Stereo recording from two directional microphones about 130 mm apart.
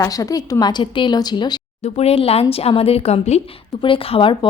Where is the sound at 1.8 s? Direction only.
50° left (ahead or behind).